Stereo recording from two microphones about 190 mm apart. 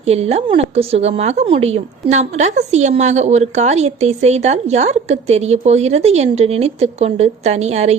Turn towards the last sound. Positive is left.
turn(degrees=-35)  # may be behind; listen again after turning